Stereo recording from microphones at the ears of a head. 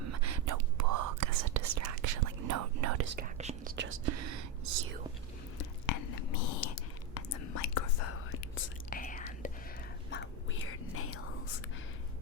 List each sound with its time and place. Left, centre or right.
0.0 s whispering: right
5.5 s whispering: left
10.1 s whispering: left